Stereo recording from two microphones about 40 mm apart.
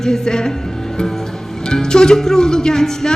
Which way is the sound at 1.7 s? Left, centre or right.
Centre.